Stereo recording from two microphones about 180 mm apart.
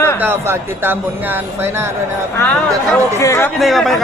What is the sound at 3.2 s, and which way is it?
Speech, 15° left (ahead or behind).